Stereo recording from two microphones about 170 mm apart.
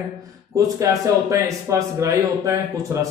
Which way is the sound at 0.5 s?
20° right (ahead or behind).